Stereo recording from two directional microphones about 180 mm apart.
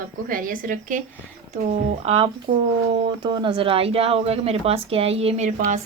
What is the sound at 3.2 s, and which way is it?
Speech, 25° right (ahead or behind).